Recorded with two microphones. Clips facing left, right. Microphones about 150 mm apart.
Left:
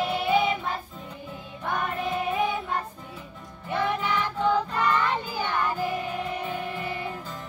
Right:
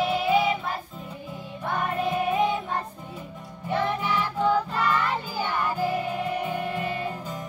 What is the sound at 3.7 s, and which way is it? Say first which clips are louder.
Music: right 1 dB; 15° right (ahead or behind).